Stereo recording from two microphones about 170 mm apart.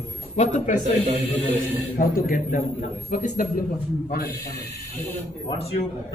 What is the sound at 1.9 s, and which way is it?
A man's voice, 55° left (ahead or behind).